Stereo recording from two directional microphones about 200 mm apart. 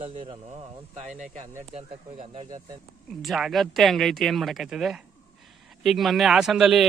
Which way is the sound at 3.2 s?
Centre (ahead or behind).